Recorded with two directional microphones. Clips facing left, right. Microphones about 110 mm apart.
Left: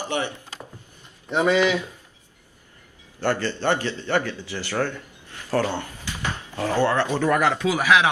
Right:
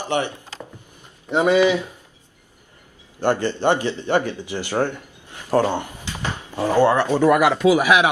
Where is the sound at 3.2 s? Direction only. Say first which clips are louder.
Right 4 dB; 15° right (ahead or behind).